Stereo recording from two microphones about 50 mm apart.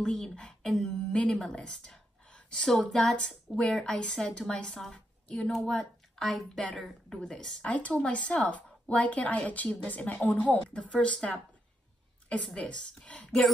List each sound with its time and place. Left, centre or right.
0.0 s a woman's voice: centre
0.8 s a woman's voice: left
2.2 s a sound: centre
3.1 s a woman's voice: centre
4.9 s a sound: left
5.5 s a woman's voice: centre
7.2 s a woman's voice: centre
7.6 s a woman's voice: left
12.5 s a woman's voice: left